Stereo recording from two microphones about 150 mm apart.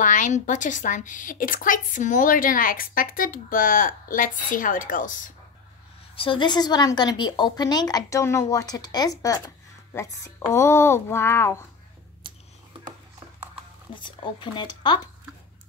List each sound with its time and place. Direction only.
0.0 s a woman's voice: 55° left (ahead or behind)
6.1 s a woman's voice: 35° left (ahead or behind); by 11.6 s 15° left (ahead or behind)
13.9 s speech: 30° left (ahead or behind)